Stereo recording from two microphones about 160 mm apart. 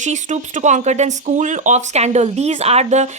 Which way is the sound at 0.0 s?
50° right (ahead or behind).